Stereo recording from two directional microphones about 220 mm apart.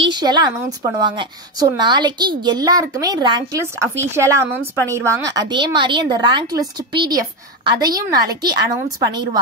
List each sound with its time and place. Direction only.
0.1 s a woman's voice: 20° right (ahead or behind)